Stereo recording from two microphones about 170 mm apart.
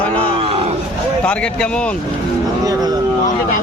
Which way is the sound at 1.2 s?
5° left (ahead or behind).